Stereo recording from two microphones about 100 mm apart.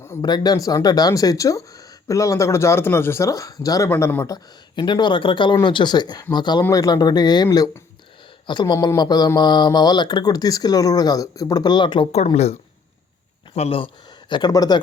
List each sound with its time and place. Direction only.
0.2 s speech: 45° left (ahead or behind)
3.8 s speech: 20° left (ahead or behind)
4.7 s speech: 50° left (ahead or behind)
6.6 s speech: 35° left (ahead or behind)
12.1 s speech: 90° left; by 14.8 s 40° left (ahead or behind)